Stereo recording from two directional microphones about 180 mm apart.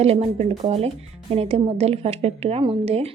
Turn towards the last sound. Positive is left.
turn(degrees=-35)  # may be behind; listen again after turning